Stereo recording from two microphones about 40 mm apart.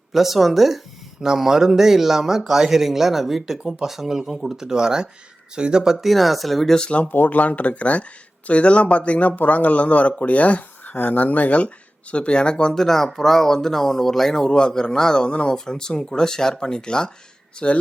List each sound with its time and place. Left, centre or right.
0.1 s speech: centre
6.1 s speech: centre
6.7 s speech: left
7.0 s speech: left
12.1 s speech: left
12.7 s speech: centre; by 17.8 s left